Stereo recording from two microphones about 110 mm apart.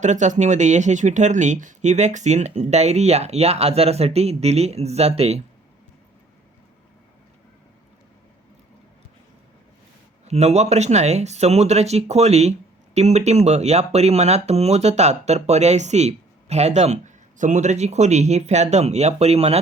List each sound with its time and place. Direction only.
0.0 s speech: 90° right; by 5.4 s 70° right (ahead or behind)
10.2 s speech: 80° right